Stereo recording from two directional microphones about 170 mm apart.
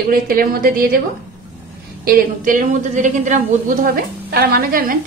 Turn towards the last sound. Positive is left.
turn(degrees=-60)  # may be behind; listen again after turning